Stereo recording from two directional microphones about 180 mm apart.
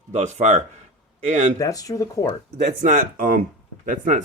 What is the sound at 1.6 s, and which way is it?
Speech, 20° left (ahead or behind).